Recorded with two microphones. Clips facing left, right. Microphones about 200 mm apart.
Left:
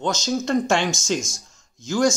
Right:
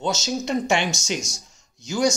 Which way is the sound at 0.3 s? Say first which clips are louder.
Left 3 dB; 20° right (ahead or behind).